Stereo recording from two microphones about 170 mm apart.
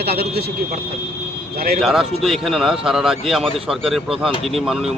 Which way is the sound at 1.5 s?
65° right (ahead or behind).